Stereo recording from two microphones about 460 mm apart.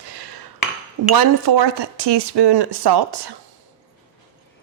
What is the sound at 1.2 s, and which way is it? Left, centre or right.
Speech, right.